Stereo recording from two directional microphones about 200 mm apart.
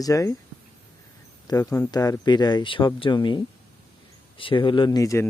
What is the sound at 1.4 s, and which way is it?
Speech, 15° left (ahead or behind).